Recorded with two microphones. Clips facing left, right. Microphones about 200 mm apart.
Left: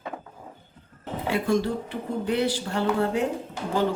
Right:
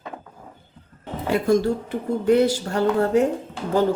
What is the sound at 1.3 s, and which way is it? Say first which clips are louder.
Speech: right 5 dB; 45° right (ahead or behind).